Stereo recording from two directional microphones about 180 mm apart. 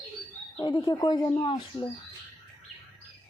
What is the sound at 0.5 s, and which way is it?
Speech, 20° left (ahead or behind).